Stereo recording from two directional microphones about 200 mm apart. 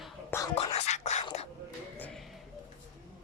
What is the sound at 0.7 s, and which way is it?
Whispering, 30° left (ahead or behind).